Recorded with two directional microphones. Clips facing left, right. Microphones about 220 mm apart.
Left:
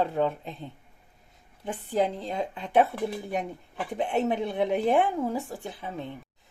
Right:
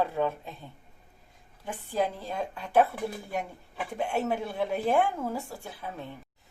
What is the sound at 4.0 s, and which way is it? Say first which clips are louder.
Speech: left 3 dB; 20° left (ahead or behind).